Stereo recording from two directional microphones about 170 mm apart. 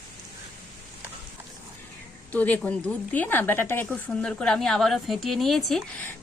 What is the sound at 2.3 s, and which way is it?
Speech, 10° left (ahead or behind).